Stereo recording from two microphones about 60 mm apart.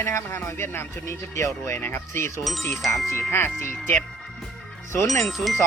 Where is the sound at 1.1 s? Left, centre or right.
Left.